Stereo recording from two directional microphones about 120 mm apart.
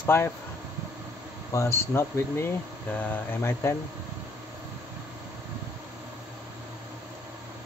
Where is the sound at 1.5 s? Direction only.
25° left (ahead or behind).